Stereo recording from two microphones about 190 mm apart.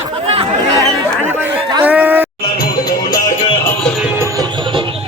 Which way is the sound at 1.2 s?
10° right (ahead or behind).